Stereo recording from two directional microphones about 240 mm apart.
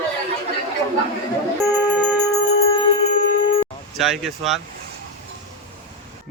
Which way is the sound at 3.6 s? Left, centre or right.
Centre.